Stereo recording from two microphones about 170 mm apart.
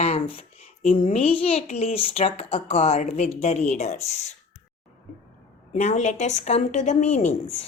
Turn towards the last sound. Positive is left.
turn(degrees=40)  # may be behind; listen again after turning